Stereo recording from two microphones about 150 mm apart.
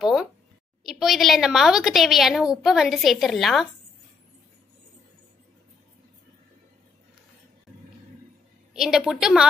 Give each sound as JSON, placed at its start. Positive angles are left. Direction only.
{"t": 0.0, "sound": "a woman's voice", "side_deg": -5}
{"t": 8.7, "sound": "a woman's voice", "side_deg": -5}